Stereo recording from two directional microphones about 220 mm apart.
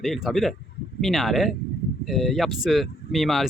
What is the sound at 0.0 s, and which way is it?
Speech, centre (ahead or behind).